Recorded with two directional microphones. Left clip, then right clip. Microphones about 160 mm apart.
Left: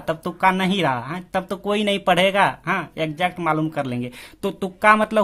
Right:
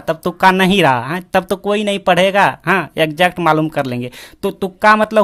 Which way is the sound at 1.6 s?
20° right (ahead or behind).